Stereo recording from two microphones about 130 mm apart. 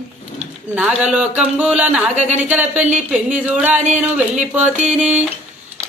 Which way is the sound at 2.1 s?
60° right (ahead or behind).